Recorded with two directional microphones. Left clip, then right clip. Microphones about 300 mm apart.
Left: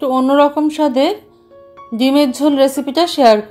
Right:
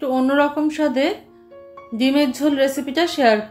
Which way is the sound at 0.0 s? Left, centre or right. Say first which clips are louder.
Left 6 dB; left.